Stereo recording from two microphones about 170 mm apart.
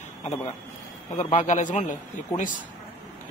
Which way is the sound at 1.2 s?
45° left (ahead or behind).